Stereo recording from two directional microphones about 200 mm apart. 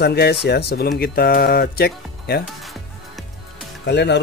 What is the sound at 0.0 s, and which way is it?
Speech, 55° left (ahead or behind).